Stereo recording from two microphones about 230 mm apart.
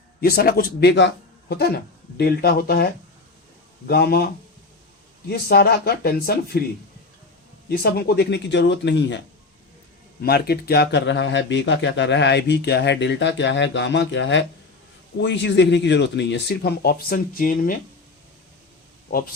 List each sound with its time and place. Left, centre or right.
0.2 s speech: left
5.3 s speech: left
7.7 s speech: left
10.2 s speech: left